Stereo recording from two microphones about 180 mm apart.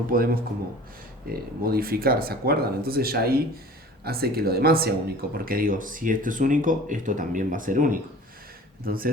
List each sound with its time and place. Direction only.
0.1 s speech: 55° right (ahead or behind)